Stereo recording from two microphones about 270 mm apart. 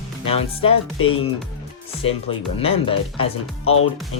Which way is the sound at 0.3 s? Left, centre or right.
Left.